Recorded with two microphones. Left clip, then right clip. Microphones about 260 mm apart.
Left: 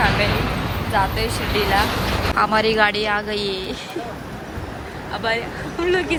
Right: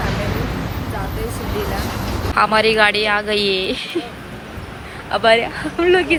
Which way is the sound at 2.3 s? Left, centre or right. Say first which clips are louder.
Right 4 dB; centre.